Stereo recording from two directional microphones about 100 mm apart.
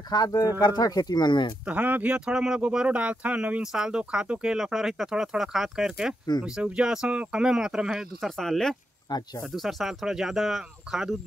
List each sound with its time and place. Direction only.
0.1 s speech: 40° left (ahead or behind)
1.7 s speech: 15° right (ahead or behind)
8.4 s speech: 5° left (ahead or behind)
9.1 s speech: 45° left (ahead or behind)
9.6 s speech: centre (ahead or behind)